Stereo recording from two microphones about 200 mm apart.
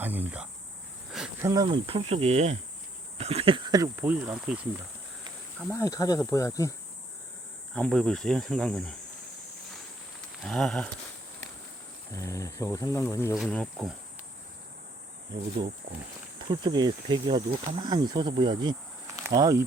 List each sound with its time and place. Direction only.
0.0 s speech: 10° right (ahead or behind)
1.4 s cricket: 15° right (ahead or behind)
3.2 s speech: 30° right (ahead or behind); by 4.6 s 5° right (ahead or behind)
5.7 s speech: 15° left (ahead or behind)
7.7 s speech: 5° left (ahead or behind)
10.4 s speech: centre (ahead or behind)
12.1 s speech: 15° left (ahead or behind)
13.3 s speech: centre (ahead or behind)
16.5 s speech: 20° right (ahead or behind)